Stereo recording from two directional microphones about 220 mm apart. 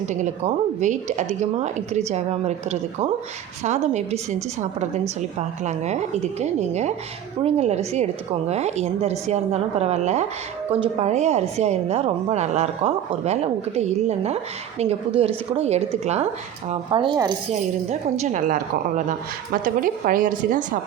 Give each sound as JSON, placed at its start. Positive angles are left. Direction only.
{"t": 0.1, "sound": "speech", "side_deg": -35}
{"t": 5.6, "sound": "a woman's voice", "side_deg": -30}